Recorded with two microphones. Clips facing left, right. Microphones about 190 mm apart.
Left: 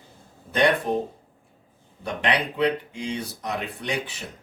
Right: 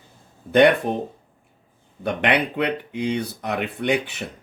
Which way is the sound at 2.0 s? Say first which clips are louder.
Right 4 dB; 60° right (ahead or behind).